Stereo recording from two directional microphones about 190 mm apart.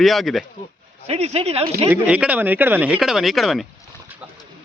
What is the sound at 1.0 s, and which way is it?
Speech, 35° right (ahead or behind).